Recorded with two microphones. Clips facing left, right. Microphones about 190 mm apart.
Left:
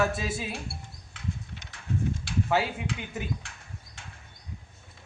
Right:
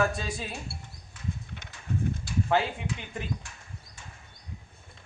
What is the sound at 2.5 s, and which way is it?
Speech, 5° left (ahead or behind).